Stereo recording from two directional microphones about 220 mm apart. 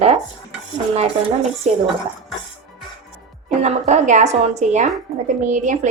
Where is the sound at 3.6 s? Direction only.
30° right (ahead or behind).